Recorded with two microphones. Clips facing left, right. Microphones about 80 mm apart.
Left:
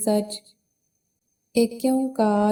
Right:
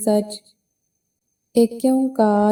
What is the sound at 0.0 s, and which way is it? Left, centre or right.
Music, right.